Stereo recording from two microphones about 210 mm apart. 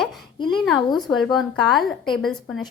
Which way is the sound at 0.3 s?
20° left (ahead or behind).